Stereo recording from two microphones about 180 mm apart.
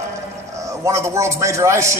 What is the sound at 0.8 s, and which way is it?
A man's voice, 15° right (ahead or behind).